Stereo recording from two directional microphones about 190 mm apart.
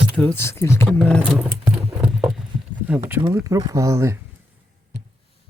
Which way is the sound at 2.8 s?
10° right (ahead or behind).